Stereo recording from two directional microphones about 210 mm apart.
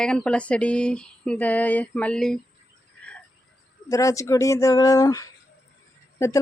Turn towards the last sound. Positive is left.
turn(degrees=15)  # may be behind; listen again after turning